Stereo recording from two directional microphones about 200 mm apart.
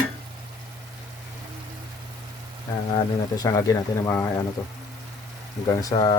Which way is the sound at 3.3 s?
15° left (ahead or behind).